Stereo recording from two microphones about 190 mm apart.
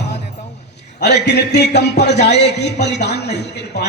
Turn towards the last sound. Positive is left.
turn(degrees=60)  # may be behind; listen again after turning